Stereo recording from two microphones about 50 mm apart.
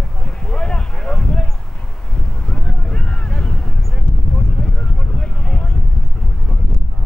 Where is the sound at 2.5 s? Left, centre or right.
Centre.